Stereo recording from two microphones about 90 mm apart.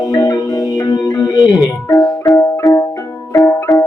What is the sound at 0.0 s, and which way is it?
Music, 45° left (ahead or behind).